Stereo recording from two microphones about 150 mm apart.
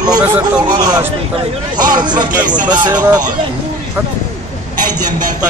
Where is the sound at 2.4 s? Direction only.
60° right (ahead or behind).